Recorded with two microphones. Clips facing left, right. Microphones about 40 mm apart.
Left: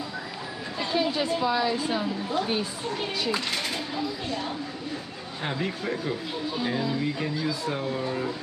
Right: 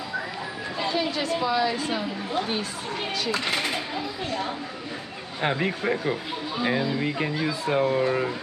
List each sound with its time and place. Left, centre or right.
0.9 s a woman's voice: centre
1.4 s a woman's voice: centre
3.4 s speech: right
5.4 s speech: right